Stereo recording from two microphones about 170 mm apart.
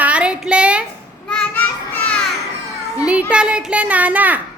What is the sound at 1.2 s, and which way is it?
Children playing, 5° left (ahead or behind).